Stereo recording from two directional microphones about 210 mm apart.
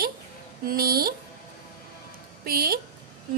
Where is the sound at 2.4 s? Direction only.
45° right (ahead or behind).